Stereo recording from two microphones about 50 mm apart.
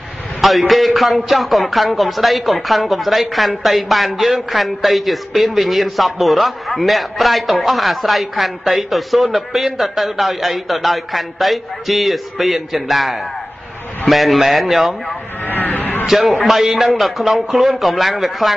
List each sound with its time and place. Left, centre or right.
0.4 s a man's voice: centre
15.4 s a sound: left
16.1 s a man's voice: centre